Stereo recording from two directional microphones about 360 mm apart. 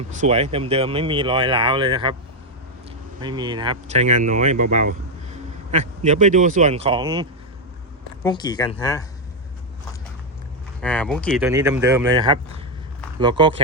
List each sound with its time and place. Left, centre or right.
0.2 s speech: centre
3.2 s speech: centre
8.2 s speech: centre
10.8 s speech: centre